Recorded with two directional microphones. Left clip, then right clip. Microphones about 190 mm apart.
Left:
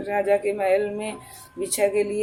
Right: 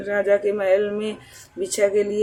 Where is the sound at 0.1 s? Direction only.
20° right (ahead or behind).